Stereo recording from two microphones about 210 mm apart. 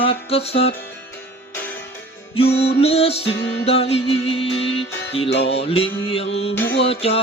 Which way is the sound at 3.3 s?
55° left (ahead or behind).